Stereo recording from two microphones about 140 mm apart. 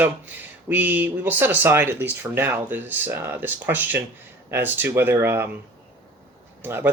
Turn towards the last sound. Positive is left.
turn(degrees=-15)  # may be behind; listen again after turning